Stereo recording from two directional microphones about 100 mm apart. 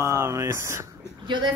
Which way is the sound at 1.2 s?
50° right (ahead or behind).